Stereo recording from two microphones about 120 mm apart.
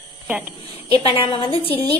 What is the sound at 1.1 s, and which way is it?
Speech, 50° left (ahead or behind).